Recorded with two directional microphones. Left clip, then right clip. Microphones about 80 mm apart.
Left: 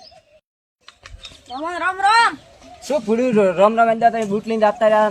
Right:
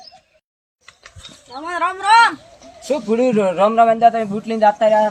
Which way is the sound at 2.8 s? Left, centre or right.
Left.